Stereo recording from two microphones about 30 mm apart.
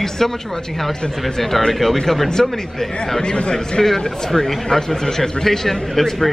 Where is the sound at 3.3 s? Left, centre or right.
Left.